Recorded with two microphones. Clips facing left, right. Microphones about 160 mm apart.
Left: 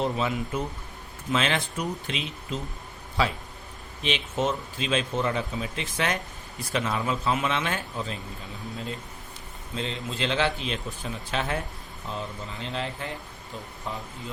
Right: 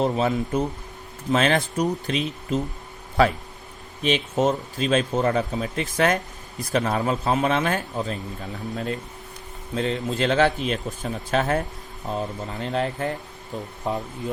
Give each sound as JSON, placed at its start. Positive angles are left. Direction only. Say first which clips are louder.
{"t": 0.0, "sound": "speech", "louder": "right 5 dB", "side_deg": -40}
{"t": 3.2, "sound": "speech", "louder": "right 7 dB", "side_deg": -55}
{"t": 4.0, "sound": "speech", "louder": "right 6 dB", "side_deg": -40}
{"t": 9.7, "sound": "speech", "louder": "right 7 dB", "side_deg": -45}